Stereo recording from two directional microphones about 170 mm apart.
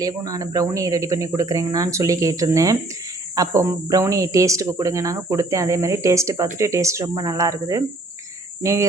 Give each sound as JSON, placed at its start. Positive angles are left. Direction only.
{"t": 0.0, "sound": "speech", "side_deg": -20}